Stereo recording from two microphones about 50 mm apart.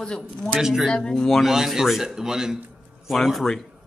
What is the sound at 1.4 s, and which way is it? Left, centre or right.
A man's voice, centre.